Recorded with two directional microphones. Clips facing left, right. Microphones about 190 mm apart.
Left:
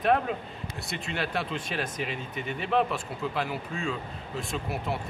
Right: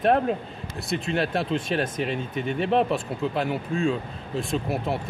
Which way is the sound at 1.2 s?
25° right (ahead or behind).